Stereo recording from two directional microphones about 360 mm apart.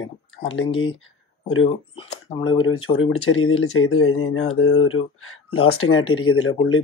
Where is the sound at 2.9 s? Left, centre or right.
Left.